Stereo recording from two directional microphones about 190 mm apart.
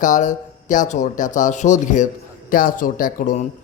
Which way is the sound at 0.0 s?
40° left (ahead or behind).